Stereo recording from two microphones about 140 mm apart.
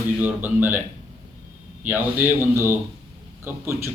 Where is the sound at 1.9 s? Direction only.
15° right (ahead or behind).